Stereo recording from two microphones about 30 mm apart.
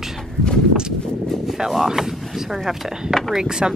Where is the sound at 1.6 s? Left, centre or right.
Centre.